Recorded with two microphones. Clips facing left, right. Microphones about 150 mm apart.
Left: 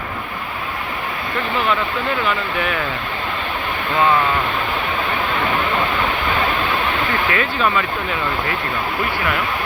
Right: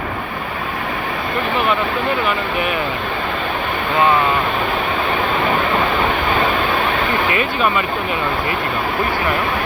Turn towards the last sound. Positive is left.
turn(degrees=-15)  # may be behind; listen again after turning